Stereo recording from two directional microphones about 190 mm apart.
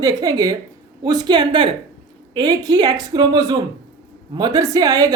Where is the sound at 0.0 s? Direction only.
20° right (ahead or behind).